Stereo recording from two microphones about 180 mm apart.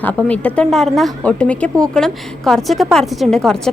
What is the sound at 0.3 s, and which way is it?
A woman's voice, 5° left (ahead or behind).